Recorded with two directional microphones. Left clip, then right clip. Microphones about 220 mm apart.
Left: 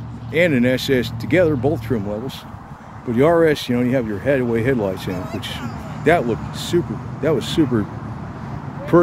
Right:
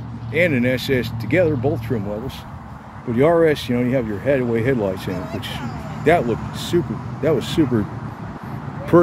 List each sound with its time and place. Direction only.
0.3 s speech: 15° left (ahead or behind)
3.1 s speech: 5° left (ahead or behind)
8.9 s speech: 5° right (ahead or behind)